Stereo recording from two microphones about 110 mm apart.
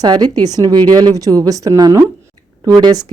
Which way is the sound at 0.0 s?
40° right (ahead or behind).